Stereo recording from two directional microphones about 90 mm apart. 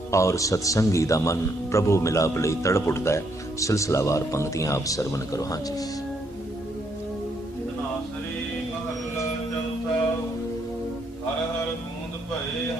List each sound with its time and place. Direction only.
0.1 s speech: 35° left (ahead or behind)